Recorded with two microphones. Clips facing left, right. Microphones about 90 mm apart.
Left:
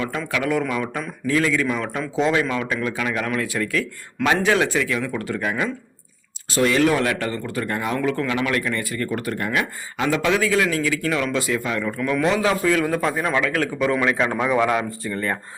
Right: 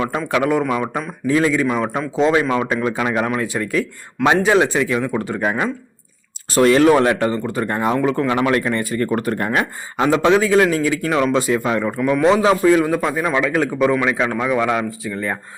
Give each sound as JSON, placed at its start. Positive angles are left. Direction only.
{"t": 0.2, "sound": "a man's voice", "side_deg": -30}
{"t": 0.7, "sound": "a man's voice", "side_deg": -20}
{"t": 6.5, "sound": "speech", "side_deg": -45}
{"t": 11.9, "sound": "a man's voice", "side_deg": -15}
{"t": 12.3, "sound": "a man's voice", "side_deg": -25}
{"t": 12.9, "sound": "a man's voice", "side_deg": -10}
{"t": 14.0, "sound": "a man's voice", "side_deg": -10}